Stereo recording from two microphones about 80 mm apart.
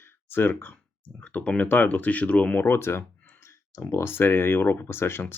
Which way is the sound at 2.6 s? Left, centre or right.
Left.